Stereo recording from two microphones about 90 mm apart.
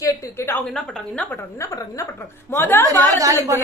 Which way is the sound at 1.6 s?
35° left (ahead or behind).